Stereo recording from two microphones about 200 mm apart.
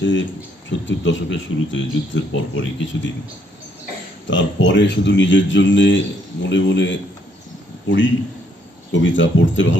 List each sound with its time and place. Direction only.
0.0 s speech: 65° left (ahead or behind)
4.3 s a man's voice: 65° left (ahead or behind)